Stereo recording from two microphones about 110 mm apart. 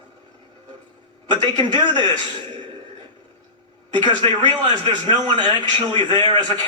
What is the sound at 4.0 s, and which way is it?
A man's voice, 45° right (ahead or behind).